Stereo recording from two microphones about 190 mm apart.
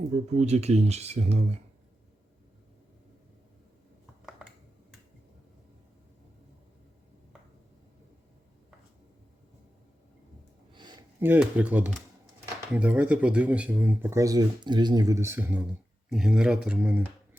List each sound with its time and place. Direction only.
0.3 s speech: 35° right (ahead or behind)
10.7 s a sound: 25° right (ahead or behind)
11.2 s speech: 10° right (ahead or behind)